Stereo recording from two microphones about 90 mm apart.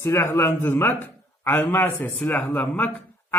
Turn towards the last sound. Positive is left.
turn(degrees=20)  # may be behind; listen again after turning